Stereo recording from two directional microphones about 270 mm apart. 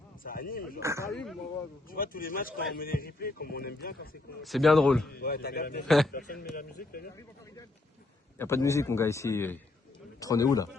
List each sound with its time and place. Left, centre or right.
0.2 s speech: left
0.8 s speech: centre
1.0 s a man's voice: centre
1.9 s speech: left
4.4 s a man's voice: centre
5.1 s speech: left
8.4 s a man's voice: centre